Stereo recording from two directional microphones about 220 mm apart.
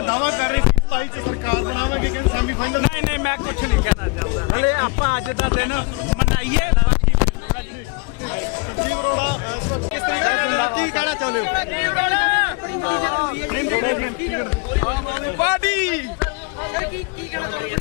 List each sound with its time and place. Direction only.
0.1 s speech: 15° left (ahead or behind)
8.9 s speech: 15° left (ahead or behind)